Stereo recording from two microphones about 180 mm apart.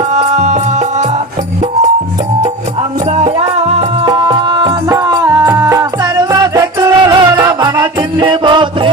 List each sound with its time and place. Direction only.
0.1 s music: 40° right (ahead or behind)
3.2 s music: 35° right (ahead or behind)
4.0 s music: 25° right (ahead or behind)